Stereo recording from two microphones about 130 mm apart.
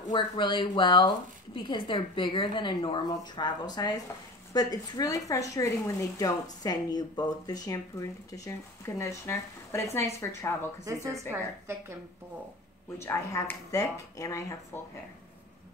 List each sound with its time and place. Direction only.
0.1 s speech: 40° left (ahead or behind); by 10.7 s 20° left (ahead or behind)
10.9 s a woman's voice: 25° right (ahead or behind)
13.0 s speech: 20° left (ahead or behind)